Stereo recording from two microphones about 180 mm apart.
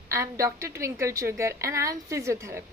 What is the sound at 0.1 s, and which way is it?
A woman's voice, 15° right (ahead or behind).